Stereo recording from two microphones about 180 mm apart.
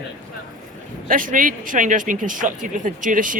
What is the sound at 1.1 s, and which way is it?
Speech, 50° right (ahead or behind).